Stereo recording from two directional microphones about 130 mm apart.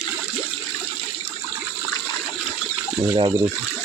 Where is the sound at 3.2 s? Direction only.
35° right (ahead or behind).